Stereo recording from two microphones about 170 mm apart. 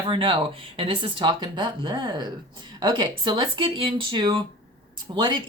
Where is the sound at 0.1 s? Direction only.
30° right (ahead or behind).